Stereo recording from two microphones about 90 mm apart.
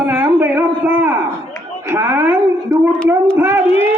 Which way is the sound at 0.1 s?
20° right (ahead or behind).